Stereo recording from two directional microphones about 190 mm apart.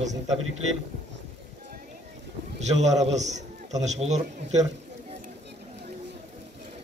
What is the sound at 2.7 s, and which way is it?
A man's voice, 35° right (ahead or behind).